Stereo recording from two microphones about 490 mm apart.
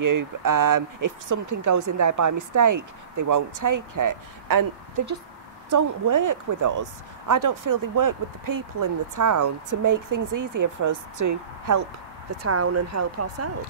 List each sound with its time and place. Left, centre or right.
0.0 s speech: right
5.7 s speech: right